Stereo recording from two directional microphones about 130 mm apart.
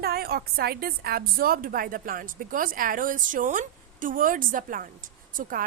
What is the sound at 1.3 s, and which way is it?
Speech, 90° right.